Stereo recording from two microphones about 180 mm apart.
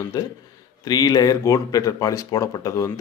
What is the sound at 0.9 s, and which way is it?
Speech, 20° left (ahead or behind).